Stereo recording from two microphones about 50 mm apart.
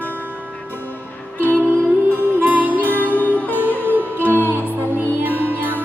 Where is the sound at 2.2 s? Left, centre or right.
Right.